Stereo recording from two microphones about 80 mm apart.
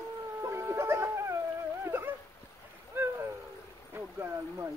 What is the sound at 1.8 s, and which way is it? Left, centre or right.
Dog, right.